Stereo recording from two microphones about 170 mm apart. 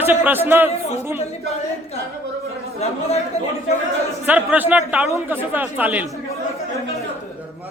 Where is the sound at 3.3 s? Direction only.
40° left (ahead or behind).